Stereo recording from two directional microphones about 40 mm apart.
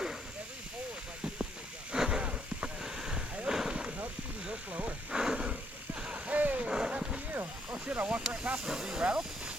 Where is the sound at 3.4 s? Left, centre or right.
Centre.